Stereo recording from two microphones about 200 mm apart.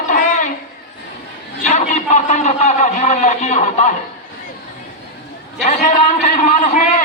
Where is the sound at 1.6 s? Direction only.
35° left (ahead or behind).